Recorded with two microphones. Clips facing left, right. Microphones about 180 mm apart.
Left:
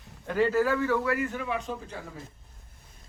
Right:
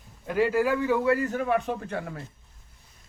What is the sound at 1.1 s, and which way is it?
Speech, 40° right (ahead or behind).